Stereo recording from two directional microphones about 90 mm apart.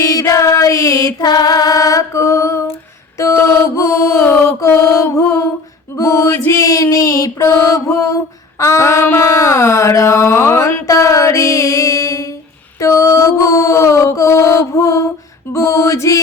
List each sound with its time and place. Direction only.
0.0 s music: 40° left (ahead or behind)
3.3 s mantra: 25° left (ahead or behind)
10.8 s music: 35° left (ahead or behind)
12.8 s mantra: 35° left (ahead or behind)
15.5 s music: 35° left (ahead or behind)